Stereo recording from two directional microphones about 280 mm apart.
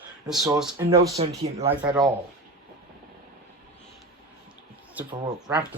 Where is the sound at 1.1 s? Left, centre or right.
Right.